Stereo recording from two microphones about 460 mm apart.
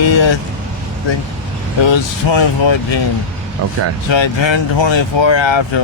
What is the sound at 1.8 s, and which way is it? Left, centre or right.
Speech, left.